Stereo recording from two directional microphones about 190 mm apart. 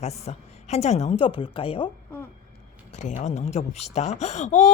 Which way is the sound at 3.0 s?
40° left (ahead or behind).